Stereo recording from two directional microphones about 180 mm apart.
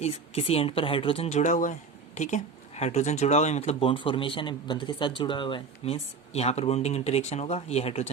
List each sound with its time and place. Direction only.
0.0 s speech: 35° left (ahead or behind)